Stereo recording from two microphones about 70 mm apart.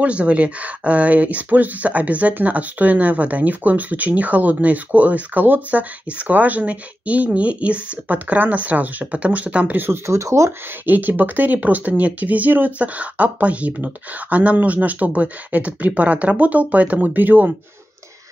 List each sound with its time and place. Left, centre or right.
0.0 s speech: centre
9.8 s speech: right
10.9 s speech: right